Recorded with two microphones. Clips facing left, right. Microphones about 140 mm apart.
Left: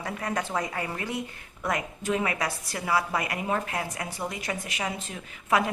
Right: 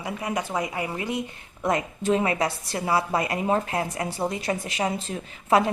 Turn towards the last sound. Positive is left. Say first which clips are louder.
# right 4 dB
turn(degrees=-30)  # may be behind; listen again after turning